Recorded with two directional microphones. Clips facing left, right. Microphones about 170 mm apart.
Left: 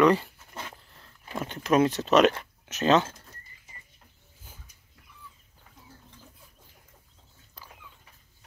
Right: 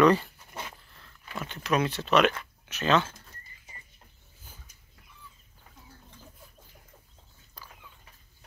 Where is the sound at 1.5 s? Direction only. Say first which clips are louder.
Left 5 dB; 45° left (ahead or behind).